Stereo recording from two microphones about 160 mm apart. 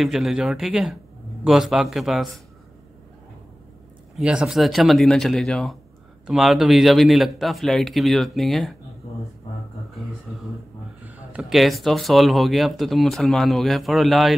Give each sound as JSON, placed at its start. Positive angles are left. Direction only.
{"t": 0.0, "sound": "speech", "side_deg": 0}
{"t": 4.2, "sound": "speech", "side_deg": -5}
{"t": 11.1, "sound": "speech", "side_deg": -5}